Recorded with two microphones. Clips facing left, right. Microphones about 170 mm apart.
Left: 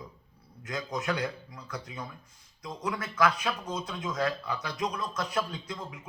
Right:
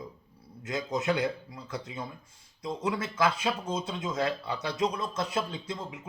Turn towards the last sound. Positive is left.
turn(degrees=-25)  # may be behind; listen again after turning